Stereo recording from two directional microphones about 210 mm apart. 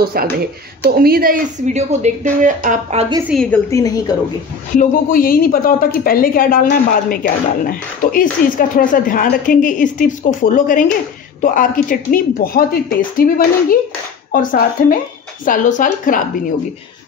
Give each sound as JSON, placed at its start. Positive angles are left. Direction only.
{"t": 0.0, "sound": "a woman's voice", "side_deg": -45}
{"t": 3.3, "sound": "a woman's voice", "side_deg": 5}
{"t": 4.7, "sound": "a woman's voice", "side_deg": 40}